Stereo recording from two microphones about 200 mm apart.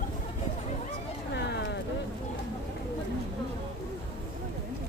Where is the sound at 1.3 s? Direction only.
60° left (ahead or behind).